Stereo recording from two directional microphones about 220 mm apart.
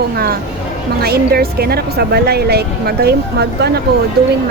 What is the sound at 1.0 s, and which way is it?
Speech, 45° right (ahead or behind).